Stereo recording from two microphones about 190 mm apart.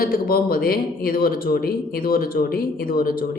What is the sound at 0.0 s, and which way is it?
Speech, 50° left (ahead or behind).